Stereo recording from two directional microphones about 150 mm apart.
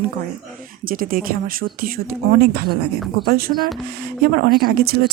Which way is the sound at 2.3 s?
90° right.